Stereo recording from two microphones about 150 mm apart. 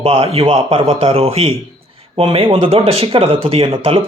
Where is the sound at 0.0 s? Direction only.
40° right (ahead or behind).